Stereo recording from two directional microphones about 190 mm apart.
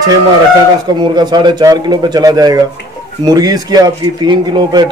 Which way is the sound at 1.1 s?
20° right (ahead or behind).